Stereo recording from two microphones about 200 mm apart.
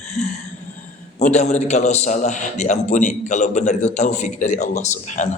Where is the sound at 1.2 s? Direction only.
35° left (ahead or behind).